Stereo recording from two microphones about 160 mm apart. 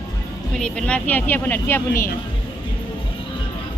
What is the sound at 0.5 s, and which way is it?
A woman's voice, 5° left (ahead or behind).